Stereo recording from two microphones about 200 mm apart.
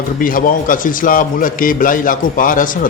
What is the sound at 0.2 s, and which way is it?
A man's voice, 45° left (ahead or behind).